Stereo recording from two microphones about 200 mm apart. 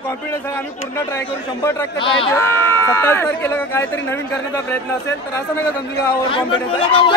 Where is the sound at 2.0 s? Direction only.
25° left (ahead or behind).